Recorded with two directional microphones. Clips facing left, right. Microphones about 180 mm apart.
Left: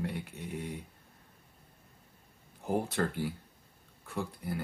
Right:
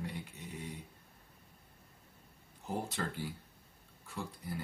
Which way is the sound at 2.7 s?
60° left (ahead or behind).